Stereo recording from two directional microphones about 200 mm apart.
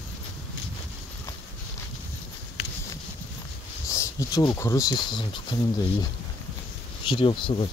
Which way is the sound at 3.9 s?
15° left (ahead or behind).